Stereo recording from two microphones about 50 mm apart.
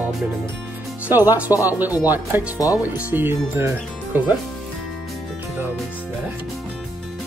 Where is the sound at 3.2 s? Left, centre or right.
Right.